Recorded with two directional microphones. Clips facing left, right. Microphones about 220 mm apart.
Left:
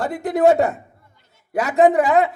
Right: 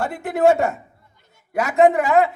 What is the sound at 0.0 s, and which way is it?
A man's voice, 35° left (ahead or behind).